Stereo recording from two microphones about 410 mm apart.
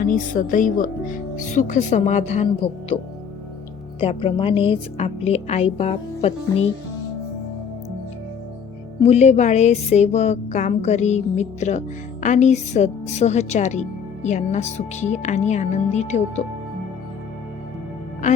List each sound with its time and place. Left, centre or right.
0.0 s speech: centre
4.0 s speech: centre
9.0 s speech: centre